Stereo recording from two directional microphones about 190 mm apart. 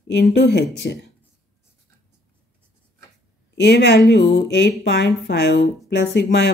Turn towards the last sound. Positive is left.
turn(degrees=65)  # may be behind; listen again after turning